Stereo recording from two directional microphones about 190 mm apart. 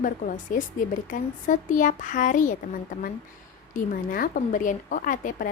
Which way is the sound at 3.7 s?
45° left (ahead or behind).